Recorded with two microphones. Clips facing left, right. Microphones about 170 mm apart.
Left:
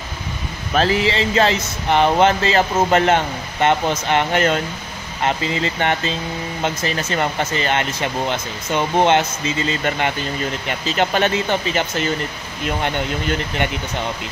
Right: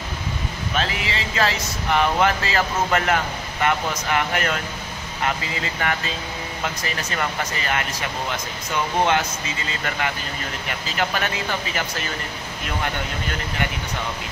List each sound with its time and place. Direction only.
0.7 s speech: 35° left (ahead or behind)